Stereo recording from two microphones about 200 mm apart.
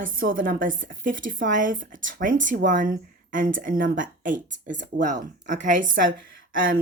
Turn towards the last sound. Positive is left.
turn(degrees=-45)  # may be behind; listen again after turning